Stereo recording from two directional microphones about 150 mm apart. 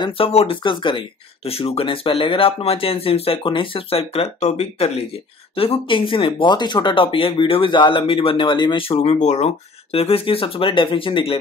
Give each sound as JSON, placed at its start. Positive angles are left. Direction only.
{"t": 0.0, "sound": "speech", "side_deg": 40}